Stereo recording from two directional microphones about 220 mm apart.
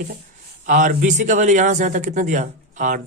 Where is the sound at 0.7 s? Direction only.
35° right (ahead or behind).